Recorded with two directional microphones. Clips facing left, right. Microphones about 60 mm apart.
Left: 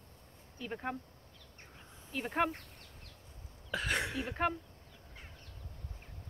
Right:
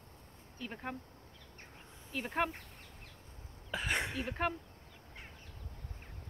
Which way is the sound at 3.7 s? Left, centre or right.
Centre.